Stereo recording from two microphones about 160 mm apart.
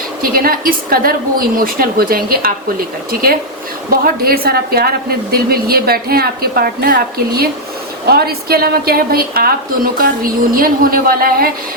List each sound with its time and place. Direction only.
0.2 s a woman's voice: 65° right (ahead or behind)